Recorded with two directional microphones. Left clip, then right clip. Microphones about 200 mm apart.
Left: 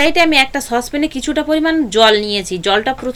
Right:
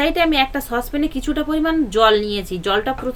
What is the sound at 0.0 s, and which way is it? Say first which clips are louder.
A woman's voice: left 5 dB; 15° left (ahead or behind).